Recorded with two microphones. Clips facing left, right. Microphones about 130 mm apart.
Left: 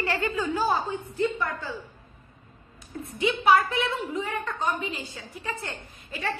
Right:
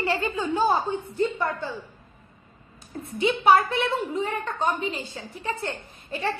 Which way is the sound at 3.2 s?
25° right (ahead or behind).